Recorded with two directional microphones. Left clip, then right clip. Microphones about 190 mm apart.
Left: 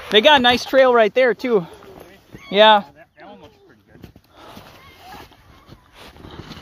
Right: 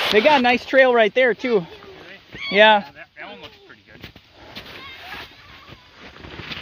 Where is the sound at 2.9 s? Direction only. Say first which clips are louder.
Right 5 dB; 25° left (ahead or behind).